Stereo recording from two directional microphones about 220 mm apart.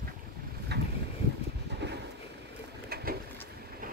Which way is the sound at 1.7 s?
50° right (ahead or behind).